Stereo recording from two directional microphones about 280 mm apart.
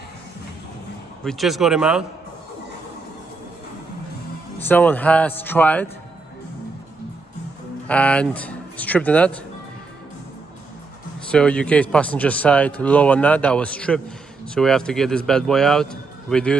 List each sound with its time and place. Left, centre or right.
1.2 s a man's voice: centre
4.6 s a man's voice: centre
7.8 s speech: centre
11.1 s a man's voice: centre